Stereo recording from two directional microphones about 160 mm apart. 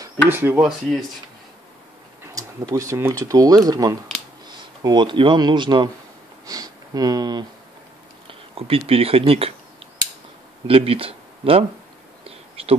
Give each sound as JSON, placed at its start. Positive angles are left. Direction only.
{"t": 0.3, "sound": "speech", "side_deg": -10}
{"t": 2.3, "sound": "speech", "side_deg": -20}
{"t": 8.3, "sound": "speech", "side_deg": -35}
{"t": 10.7, "sound": "speech", "side_deg": -35}